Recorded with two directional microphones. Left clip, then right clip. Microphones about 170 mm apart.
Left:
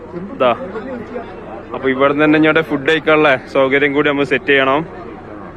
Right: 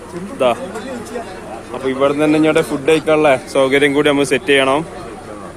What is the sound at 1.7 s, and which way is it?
Speech, 10° right (ahead or behind).